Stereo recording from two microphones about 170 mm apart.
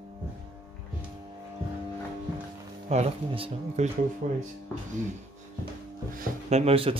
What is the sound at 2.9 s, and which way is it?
Speech, 35° right (ahead or behind).